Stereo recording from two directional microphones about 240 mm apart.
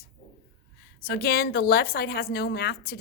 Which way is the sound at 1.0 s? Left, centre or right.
Left.